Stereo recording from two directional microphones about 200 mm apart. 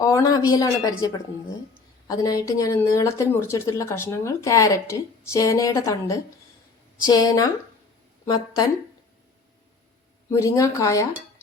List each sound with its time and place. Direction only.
0.0 s speech: 15° left (ahead or behind)
2.0 s speech: 15° left (ahead or behind)
10.2 s speech: 15° left (ahead or behind)